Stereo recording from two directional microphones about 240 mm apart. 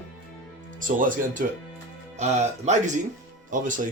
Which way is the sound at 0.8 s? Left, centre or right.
Right.